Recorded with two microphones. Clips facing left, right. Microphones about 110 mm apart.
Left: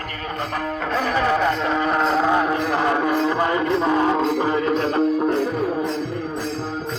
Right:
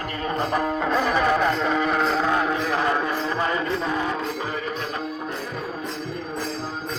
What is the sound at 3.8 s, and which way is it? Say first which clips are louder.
Music: left 7 dB; 40° left (ahead or behind).